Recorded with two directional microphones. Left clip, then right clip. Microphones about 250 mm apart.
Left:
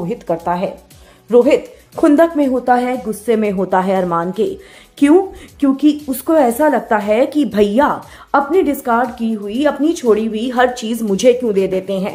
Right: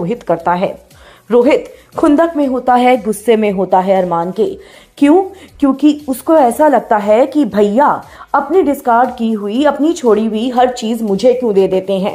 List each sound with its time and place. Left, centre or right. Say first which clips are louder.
0.1 s a woman's voice: right 4 dB; centre
2.1 s speech: even; centre
2.7 s a woman's voice: right 5 dB; centre
3.5 s speech: right 4 dB; centre
9.1 s speech: right 4 dB; centre